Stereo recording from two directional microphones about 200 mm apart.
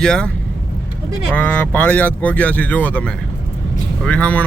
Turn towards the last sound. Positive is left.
turn(degrees=5)  # may be behind; listen again after turning